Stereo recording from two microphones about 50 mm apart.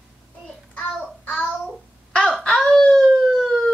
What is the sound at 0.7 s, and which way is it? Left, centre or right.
Child singing, left.